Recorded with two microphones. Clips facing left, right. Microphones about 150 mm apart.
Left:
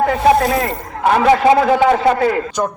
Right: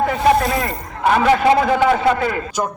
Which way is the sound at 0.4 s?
Centre (ahead or behind).